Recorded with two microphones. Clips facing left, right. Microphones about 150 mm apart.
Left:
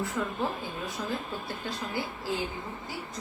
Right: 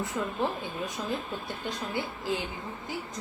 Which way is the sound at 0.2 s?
20° right (ahead or behind).